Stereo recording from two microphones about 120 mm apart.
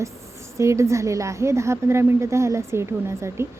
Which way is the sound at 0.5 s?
25° right (ahead or behind).